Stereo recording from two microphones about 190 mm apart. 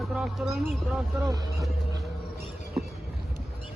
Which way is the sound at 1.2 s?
20° right (ahead or behind).